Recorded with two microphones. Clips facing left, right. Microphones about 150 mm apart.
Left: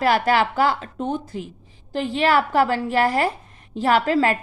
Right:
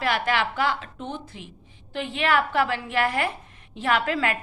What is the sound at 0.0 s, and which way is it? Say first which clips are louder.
A woman's voice: left 6 dB; 40° left (ahead or behind).